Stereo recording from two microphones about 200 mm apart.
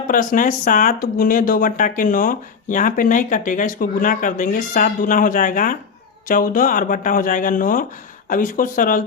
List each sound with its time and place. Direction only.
0.1 s speech: 40° left (ahead or behind)